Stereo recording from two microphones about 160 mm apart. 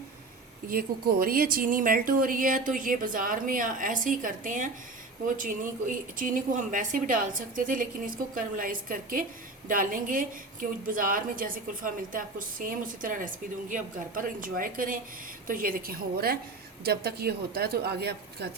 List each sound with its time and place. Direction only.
0.7 s a woman's voice: 65° right (ahead or behind); by 18.4 s 90° right